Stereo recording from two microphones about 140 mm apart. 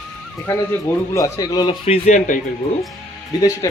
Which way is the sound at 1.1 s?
25° left (ahead or behind).